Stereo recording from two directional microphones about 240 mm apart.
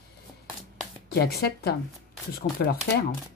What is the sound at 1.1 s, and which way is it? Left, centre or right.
Speech, left.